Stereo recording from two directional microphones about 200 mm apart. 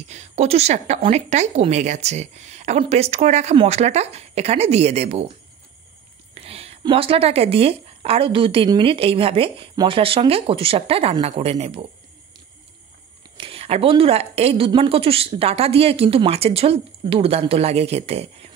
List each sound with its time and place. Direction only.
0.1 s speech: 35° right (ahead or behind)
6.3 s speech: 30° right (ahead or behind)
13.4 s speech: 30° right (ahead or behind)